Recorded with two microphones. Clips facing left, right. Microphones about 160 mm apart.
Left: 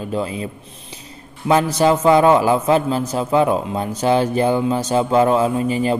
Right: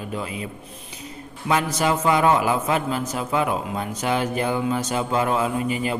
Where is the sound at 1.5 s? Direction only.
30° left (ahead or behind).